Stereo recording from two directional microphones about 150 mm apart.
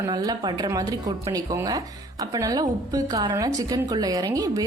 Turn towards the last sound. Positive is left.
turn(degrees=-25)  # may be behind; listen again after turning